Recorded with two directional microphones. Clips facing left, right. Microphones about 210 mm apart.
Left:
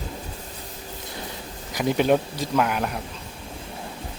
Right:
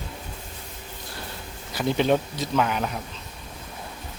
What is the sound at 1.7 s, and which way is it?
Speech, 10° left (ahead or behind).